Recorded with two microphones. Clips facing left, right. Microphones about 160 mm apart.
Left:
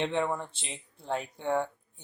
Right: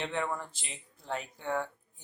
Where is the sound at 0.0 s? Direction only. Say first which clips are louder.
Left 5 dB; 25° left (ahead or behind).